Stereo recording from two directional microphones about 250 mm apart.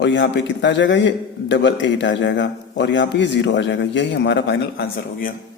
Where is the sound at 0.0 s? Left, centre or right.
Left.